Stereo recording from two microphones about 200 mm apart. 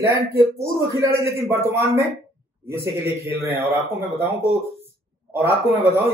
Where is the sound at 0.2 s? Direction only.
50° right (ahead or behind).